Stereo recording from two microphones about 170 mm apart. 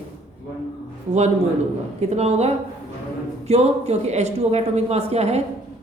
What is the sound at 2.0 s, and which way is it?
A woman's voice, 40° right (ahead or behind).